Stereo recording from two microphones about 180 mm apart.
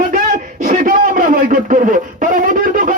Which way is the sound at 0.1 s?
45° right (ahead or behind).